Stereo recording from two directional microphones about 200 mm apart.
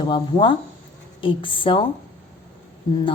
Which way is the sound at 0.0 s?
25° left (ahead or behind).